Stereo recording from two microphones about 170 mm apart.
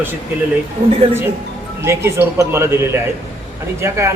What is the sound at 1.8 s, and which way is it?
A man's voice, 15° right (ahead or behind).